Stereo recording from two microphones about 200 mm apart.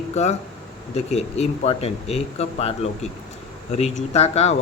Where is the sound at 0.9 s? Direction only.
30° left (ahead or behind).